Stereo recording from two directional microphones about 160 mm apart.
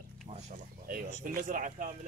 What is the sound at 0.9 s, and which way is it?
Speech, 60° right (ahead or behind).